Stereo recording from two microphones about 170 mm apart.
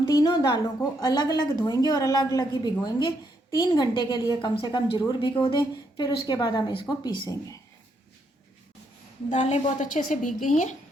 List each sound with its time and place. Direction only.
0.0 s a woman's voice: 25° left (ahead or behind)
9.3 s a woman's voice: 45° left (ahead or behind)